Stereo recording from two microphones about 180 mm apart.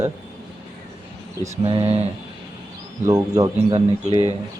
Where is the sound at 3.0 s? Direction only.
20° right (ahead or behind).